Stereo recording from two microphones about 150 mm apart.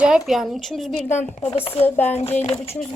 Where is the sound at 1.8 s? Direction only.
10° left (ahead or behind).